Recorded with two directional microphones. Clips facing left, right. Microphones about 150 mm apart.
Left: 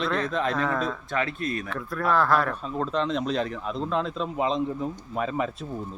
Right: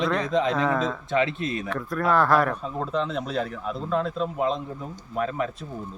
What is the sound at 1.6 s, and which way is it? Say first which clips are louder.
Speech: right 3 dB; centre (ahead or behind).